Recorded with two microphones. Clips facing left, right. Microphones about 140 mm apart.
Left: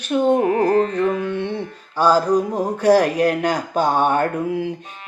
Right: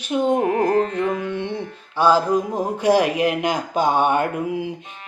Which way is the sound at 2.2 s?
10° right (ahead or behind).